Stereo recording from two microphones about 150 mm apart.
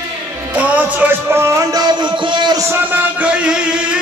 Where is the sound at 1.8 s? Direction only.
30° right (ahead or behind).